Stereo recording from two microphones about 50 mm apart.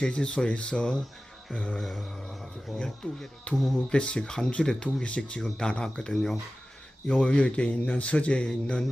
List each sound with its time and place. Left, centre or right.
0.0 s speech: centre
1.5 s speech: left
1.8 s a sound: centre
2.7 s speech: centre
3.5 s speech: left